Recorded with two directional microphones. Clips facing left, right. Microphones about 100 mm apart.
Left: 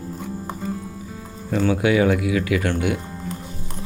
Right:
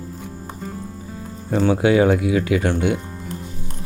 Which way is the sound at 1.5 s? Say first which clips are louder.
Right 2 dB; 30° right (ahead or behind).